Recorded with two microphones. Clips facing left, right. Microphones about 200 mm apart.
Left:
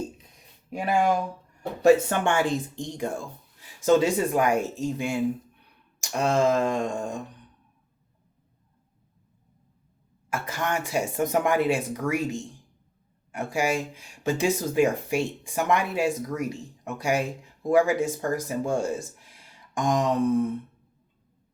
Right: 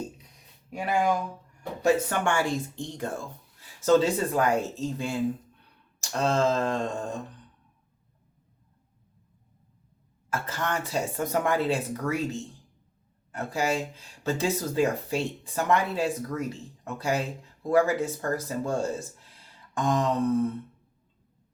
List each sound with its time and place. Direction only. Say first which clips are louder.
2.0 s speech: left 2 dB; 20° left (ahead or behind)
10.2 s speech: left 2 dB; 15° left (ahead or behind)